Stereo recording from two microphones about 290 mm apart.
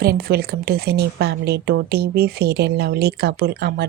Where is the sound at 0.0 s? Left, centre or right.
Right.